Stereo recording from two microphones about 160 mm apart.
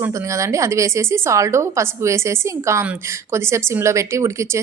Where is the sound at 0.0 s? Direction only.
20° right (ahead or behind).